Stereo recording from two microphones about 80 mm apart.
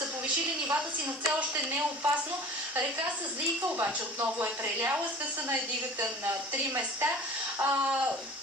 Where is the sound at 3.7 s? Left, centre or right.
Right.